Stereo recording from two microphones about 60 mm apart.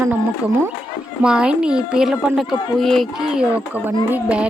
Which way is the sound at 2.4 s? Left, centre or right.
Centre.